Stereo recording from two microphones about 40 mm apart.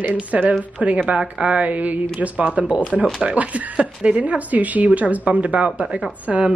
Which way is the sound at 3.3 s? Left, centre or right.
Right.